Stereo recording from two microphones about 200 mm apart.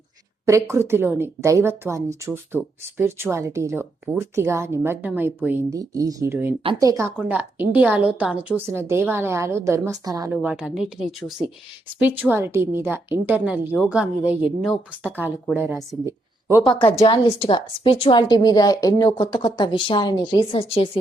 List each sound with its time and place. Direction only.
0.4 s speech: 15° right (ahead or behind)
10.3 s a woman's voice: 5° right (ahead or behind)
16.0 s a sound: 10° right (ahead or behind)
16.7 s a woman's voice: 25° left (ahead or behind)